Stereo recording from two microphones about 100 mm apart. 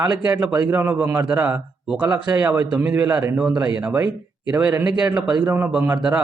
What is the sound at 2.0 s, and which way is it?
Speech, 30° right (ahead or behind).